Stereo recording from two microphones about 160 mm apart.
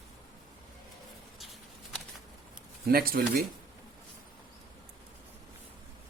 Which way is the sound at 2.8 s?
65° right (ahead or behind).